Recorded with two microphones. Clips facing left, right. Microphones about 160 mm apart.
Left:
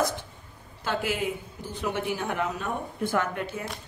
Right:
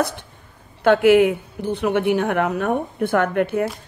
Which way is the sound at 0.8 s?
70° right (ahead or behind).